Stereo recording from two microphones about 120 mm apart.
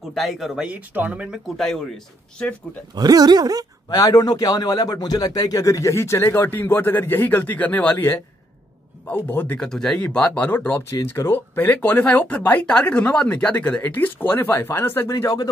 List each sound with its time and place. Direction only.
0.1 s speech: centre (ahead or behind)
0.7 s speech: 10° right (ahead or behind)
2.9 s speech: 35° right (ahead or behind)
3.9 s a man's voice: 30° left (ahead or behind); by 9.7 s 15° left (ahead or behind)
9.7 s speech: 5° left (ahead or behind); by 15.5 s 30° left (ahead or behind)